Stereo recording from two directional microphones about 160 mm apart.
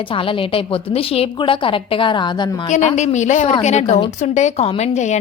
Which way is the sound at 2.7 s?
45° left (ahead or behind).